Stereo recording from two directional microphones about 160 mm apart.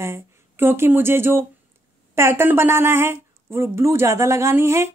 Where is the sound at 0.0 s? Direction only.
15° right (ahead or behind).